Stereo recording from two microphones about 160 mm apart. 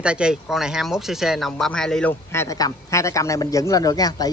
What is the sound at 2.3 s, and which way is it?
Speech, 20° left (ahead or behind).